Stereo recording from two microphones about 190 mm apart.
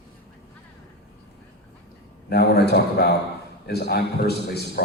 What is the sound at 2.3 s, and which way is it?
A man's voice, 60° left (ahead or behind).